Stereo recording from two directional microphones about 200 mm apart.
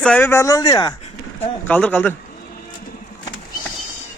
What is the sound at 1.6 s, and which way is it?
Speech, 10° left (ahead or behind).